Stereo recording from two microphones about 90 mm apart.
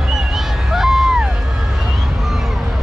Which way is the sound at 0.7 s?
5° right (ahead or behind).